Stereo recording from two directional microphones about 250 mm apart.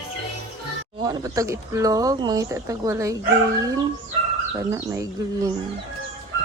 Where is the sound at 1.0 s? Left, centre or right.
Centre.